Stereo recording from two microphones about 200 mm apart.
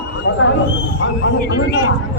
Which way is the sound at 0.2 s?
70° left (ahead or behind).